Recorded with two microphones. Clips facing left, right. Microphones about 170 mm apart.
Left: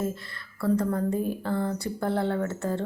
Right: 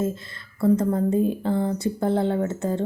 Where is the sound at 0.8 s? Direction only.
20° right (ahead or behind).